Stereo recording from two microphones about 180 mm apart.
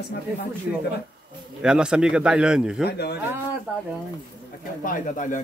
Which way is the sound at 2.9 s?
60° left (ahead or behind).